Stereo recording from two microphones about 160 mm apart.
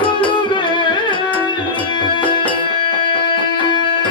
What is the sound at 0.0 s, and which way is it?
Music, 30° left (ahead or behind).